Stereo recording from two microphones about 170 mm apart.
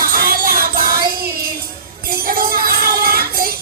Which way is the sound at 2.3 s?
60° right (ahead or behind).